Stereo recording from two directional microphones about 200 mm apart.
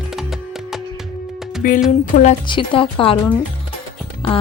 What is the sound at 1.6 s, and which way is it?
Speech, 45° left (ahead or behind).